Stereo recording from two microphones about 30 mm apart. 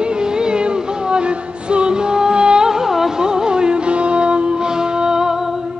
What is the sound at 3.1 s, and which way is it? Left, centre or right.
Music, right.